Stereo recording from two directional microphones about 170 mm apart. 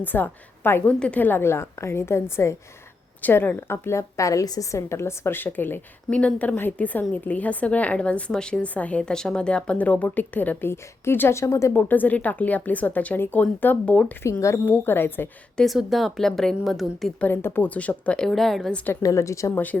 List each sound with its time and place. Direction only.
0.0 s a woman's voice: 10° left (ahead or behind)
15.6 s a woman's voice: centre (ahead or behind)
19.0 s a woman's voice: 15° left (ahead or behind)